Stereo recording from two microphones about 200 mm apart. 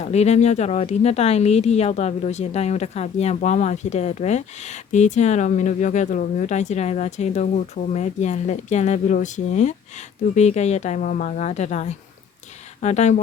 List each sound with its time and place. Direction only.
0.0 s speech: 35° left (ahead or behind)